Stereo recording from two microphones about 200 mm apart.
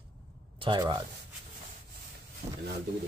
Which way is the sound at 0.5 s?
25° right (ahead or behind).